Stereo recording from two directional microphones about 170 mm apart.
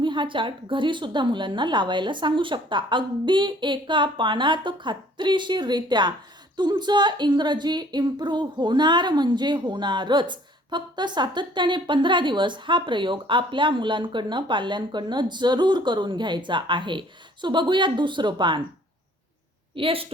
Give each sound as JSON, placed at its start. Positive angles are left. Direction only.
{"t": 0.0, "sound": "speech", "side_deg": -30}
{"t": 19.7, "sound": "a woman's voice", "side_deg": -30}